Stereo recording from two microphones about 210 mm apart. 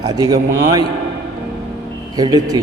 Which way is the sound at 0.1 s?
20° right (ahead or behind).